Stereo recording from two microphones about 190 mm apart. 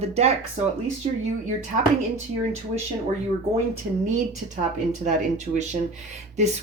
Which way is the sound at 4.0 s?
40° right (ahead or behind).